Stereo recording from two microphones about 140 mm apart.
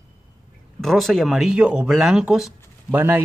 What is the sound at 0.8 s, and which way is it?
Speech, centre (ahead or behind).